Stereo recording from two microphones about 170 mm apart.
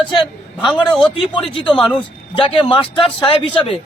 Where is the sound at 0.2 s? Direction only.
Centre (ahead or behind).